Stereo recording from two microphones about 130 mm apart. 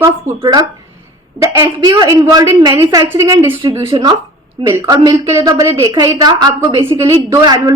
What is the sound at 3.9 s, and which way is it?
A woman's voice, 35° right (ahead or behind).